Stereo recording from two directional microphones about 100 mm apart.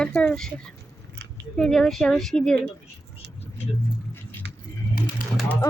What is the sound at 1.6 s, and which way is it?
Speech, 5° left (ahead or behind).